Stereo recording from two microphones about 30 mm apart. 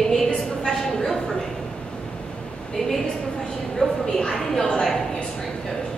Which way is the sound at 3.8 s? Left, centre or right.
Left.